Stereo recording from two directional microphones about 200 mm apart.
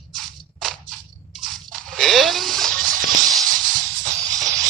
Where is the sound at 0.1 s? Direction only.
Centre (ahead or behind).